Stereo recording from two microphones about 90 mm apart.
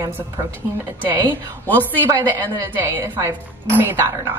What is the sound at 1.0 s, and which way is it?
Speech, 60° right (ahead or behind).